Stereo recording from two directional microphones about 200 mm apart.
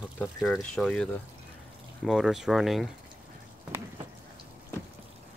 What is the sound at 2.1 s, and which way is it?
Speech, centre (ahead or behind).